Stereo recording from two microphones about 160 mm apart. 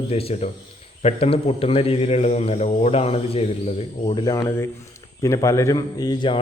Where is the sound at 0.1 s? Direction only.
40° left (ahead or behind).